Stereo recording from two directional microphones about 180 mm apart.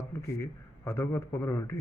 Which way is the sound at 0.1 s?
15° left (ahead or behind).